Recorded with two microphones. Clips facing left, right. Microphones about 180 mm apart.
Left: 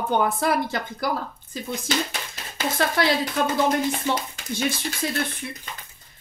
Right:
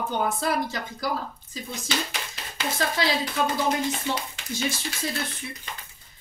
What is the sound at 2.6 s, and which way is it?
Speech, 55° left (ahead or behind).